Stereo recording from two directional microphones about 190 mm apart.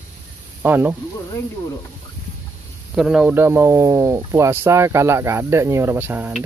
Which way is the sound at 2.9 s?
5° right (ahead or behind).